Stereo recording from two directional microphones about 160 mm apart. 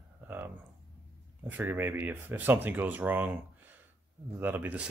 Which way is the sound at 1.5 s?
10° right (ahead or behind).